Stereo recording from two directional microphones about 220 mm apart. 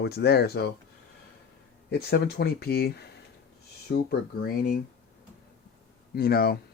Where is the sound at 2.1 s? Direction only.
45° left (ahead or behind).